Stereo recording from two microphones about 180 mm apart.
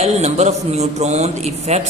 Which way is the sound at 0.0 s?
35° right (ahead or behind).